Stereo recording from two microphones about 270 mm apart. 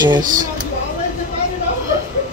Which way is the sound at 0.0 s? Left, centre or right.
Centre.